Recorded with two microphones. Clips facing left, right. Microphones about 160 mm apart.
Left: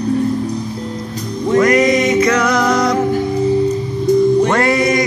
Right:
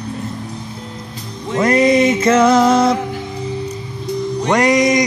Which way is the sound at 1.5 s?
30° right (ahead or behind).